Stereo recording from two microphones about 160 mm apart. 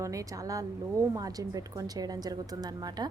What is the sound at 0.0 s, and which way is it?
A woman's voice, 20° right (ahead or behind).